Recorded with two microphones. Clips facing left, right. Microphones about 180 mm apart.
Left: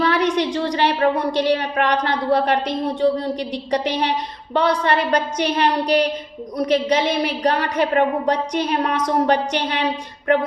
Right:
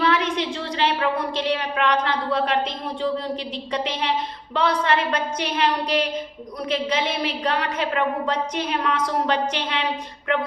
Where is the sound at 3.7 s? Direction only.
35° left (ahead or behind).